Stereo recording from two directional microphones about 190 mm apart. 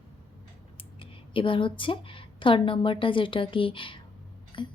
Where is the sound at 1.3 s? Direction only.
25° left (ahead or behind).